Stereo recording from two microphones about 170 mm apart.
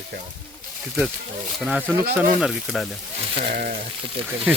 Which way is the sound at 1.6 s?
5° right (ahead or behind).